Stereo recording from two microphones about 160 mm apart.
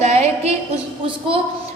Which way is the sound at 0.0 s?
45° right (ahead or behind).